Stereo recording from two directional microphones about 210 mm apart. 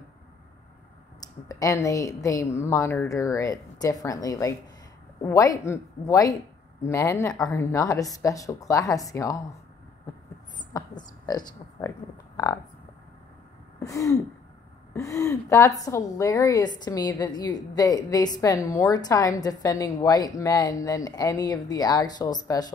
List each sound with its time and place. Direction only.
1.2 s a woman's voice: 15° left (ahead or behind)
10.7 s a woman's voice: 20° left (ahead or behind)
13.7 s a woman's voice: 15° left (ahead or behind)